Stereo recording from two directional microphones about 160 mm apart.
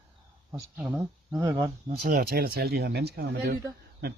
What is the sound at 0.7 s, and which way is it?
Speech, centre (ahead or behind).